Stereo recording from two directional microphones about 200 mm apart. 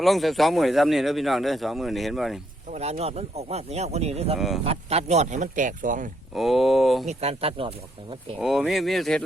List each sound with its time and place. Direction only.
0.0 s speech: centre (ahead or behind)
2.7 s speech: 30° right (ahead or behind)
4.4 s speech: centre (ahead or behind)
4.6 s speech: 30° right (ahead or behind)
6.3 s speech: centre (ahead or behind)
7.1 s speech: 30° right (ahead or behind)
8.4 s speech: centre (ahead or behind)